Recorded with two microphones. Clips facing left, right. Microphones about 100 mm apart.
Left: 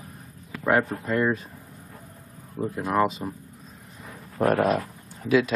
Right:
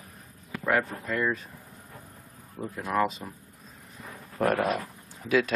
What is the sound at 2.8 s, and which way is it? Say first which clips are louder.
Speech: left 3 dB; 15° left (ahead or behind).